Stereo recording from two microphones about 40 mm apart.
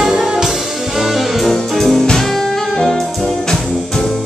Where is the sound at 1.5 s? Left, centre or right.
Centre.